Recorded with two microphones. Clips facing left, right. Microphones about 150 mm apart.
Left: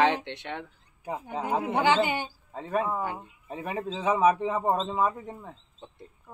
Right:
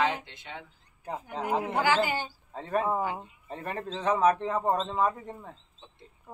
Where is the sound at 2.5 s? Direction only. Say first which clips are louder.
Even; centre (ahead or behind).